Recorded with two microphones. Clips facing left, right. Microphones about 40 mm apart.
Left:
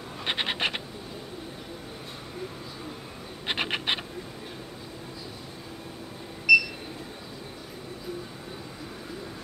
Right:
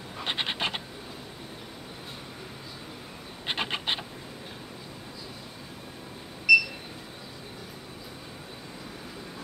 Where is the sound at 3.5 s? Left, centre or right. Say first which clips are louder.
Left 2 dB; left.